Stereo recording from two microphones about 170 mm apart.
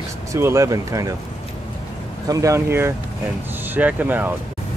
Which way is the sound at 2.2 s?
20° right (ahead or behind).